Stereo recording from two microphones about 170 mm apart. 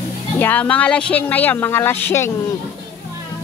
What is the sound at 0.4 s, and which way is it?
Speech, 10° left (ahead or behind).